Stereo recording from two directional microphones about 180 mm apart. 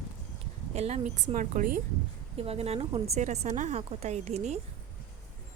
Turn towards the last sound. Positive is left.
turn(degrees=-40)  # may be behind; listen again after turning